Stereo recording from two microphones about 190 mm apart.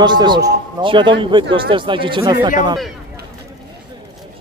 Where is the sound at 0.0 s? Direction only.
25° right (ahead or behind).